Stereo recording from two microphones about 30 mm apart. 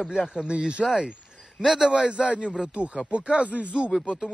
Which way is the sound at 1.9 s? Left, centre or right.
Right.